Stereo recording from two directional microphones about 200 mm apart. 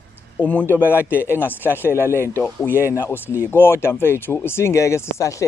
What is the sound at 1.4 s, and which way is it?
Speech, 10° left (ahead or behind).